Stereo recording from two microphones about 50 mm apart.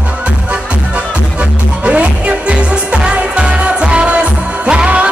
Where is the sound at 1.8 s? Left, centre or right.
Right.